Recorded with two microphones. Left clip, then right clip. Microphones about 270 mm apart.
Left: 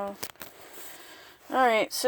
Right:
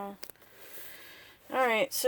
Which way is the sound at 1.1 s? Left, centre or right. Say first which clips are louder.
Left 5 dB; left.